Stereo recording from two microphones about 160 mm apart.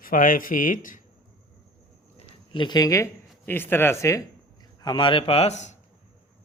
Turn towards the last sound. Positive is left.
turn(degrees=45)  # may be behind; listen again after turning